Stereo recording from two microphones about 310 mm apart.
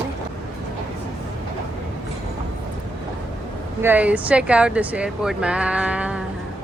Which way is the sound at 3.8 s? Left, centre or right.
Centre.